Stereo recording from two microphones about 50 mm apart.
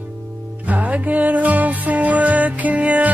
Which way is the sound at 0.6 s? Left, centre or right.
Right.